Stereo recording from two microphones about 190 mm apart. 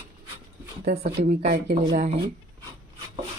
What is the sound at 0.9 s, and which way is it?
Speech, 50° right (ahead or behind).